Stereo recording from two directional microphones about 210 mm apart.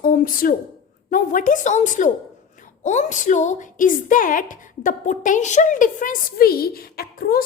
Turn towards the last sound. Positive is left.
turn(degrees=45)  # may be behind; listen again after turning